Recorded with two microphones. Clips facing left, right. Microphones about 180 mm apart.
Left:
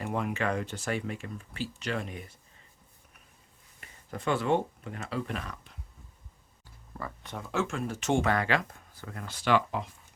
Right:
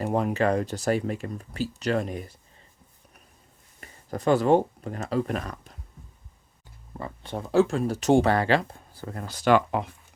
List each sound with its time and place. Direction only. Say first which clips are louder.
0.0 s speech: right 7 dB; 35° right (ahead or behind)
3.8 s speech: right 7 dB; 40° right (ahead or behind)
6.9 s speech: right 6 dB; 25° right (ahead or behind); by 9.9 s 55° right (ahead or behind)